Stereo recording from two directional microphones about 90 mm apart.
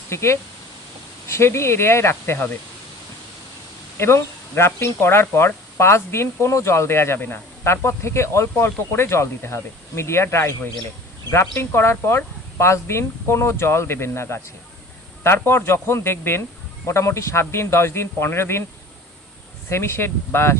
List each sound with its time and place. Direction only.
0.1 s a man's voice: 30° left (ahead or behind)
3.9 s a man's voice: 30° left (ahead or behind)
19.7 s speech: 30° left (ahead or behind)